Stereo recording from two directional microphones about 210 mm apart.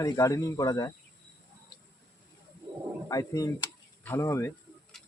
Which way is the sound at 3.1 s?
15° left (ahead or behind).